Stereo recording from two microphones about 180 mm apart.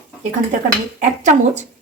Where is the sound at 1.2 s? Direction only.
45° right (ahead or behind).